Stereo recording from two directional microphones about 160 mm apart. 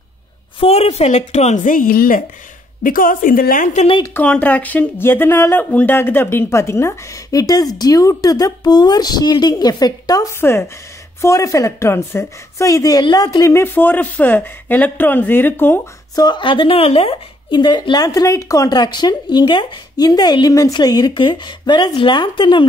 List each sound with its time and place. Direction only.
0.6 s a woman's voice: 40° left (ahead or behind); by 3.8 s 55° left (ahead or behind)
4.0 s a woman's voice: 10° left (ahead or behind)
16.3 s speech: 30° left (ahead or behind)